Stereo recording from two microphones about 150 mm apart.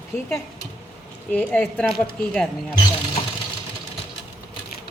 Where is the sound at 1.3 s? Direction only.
10° left (ahead or behind).